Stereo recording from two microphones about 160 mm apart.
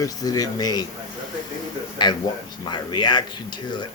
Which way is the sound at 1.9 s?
25° left (ahead or behind).